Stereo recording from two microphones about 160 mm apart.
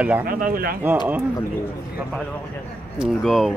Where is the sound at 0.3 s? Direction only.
60° right (ahead or behind).